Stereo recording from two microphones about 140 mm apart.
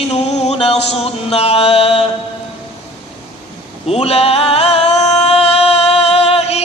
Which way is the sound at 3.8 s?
45° left (ahead or behind).